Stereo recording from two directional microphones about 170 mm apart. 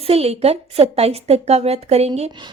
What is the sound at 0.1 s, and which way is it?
A woman's voice, 35° right (ahead or behind).